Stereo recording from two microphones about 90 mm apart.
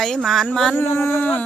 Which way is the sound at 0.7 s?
30° left (ahead or behind).